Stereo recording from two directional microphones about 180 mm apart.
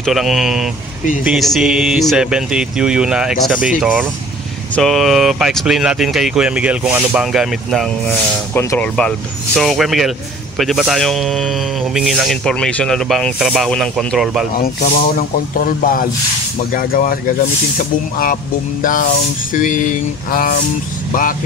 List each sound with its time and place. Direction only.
0.0 s speech: centre (ahead or behind)
14.6 s speech: 55° left (ahead or behind)